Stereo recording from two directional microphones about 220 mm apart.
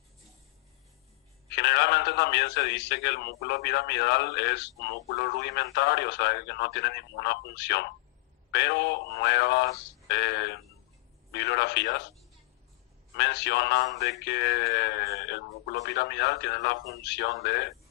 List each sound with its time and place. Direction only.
1.5 s a man's voice: 50° left (ahead or behind)
13.1 s a man's voice: 50° left (ahead or behind)